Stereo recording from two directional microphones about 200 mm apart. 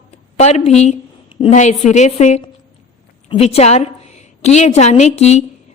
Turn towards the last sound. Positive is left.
turn(degrees=35)  # may be behind; listen again after turning